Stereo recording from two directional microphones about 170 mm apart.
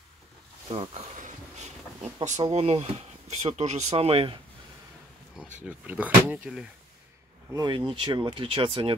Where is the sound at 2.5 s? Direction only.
40° right (ahead or behind).